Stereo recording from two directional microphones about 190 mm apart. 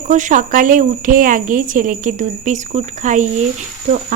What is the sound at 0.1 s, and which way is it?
A woman's voice, 40° right (ahead or behind).